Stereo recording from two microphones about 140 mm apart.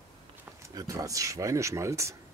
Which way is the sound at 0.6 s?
25° right (ahead or behind).